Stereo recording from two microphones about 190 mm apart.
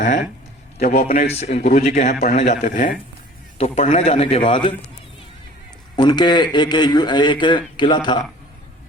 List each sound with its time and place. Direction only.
0.0 s a sound: 40° left (ahead or behind)
0.8 s a man's voice: 45° left (ahead or behind)
1.4 s a man's voice: 35° left (ahead or behind)
6.0 s a man's voice: 25° left (ahead or behind)